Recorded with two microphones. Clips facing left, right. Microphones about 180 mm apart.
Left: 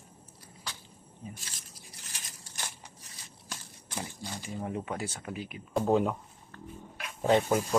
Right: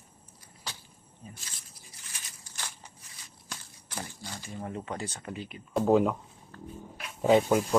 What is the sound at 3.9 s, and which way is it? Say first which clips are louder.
Squish: left 2 dB; 15° left (ahead or behind).